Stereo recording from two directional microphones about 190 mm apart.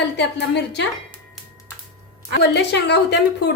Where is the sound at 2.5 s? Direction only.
65° left (ahead or behind).